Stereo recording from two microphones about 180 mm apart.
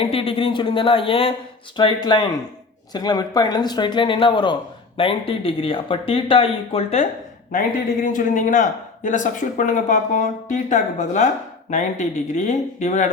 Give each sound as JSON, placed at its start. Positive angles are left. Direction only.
{"t": 0.0, "sound": "speech", "side_deg": 30}
{"t": 8.0, "sound": "speech", "side_deg": 45}